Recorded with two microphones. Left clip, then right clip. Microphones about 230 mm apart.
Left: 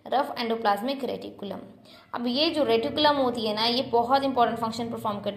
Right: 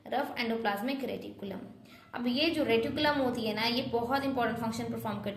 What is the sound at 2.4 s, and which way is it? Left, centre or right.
A woman's voice, centre.